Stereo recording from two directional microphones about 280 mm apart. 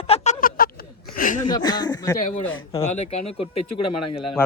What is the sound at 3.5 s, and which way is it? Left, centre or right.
Speech, left.